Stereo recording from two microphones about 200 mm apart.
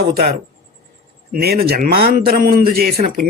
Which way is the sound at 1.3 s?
50° right (ahead or behind).